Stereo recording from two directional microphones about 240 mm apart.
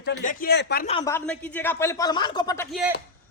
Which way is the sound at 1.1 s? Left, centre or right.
Centre.